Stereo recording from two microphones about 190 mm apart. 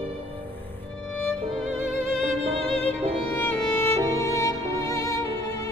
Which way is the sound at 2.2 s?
35° right (ahead or behind).